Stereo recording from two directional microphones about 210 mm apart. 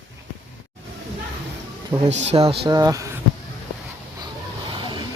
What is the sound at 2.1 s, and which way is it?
Speech, 30° right (ahead or behind).